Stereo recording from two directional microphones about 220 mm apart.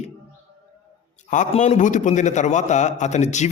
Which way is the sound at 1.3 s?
35° left (ahead or behind).